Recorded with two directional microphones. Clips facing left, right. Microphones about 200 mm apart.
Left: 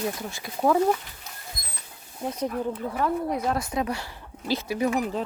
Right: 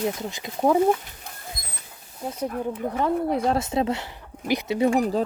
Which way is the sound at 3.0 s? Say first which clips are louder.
Right 3 dB; 30° right (ahead or behind).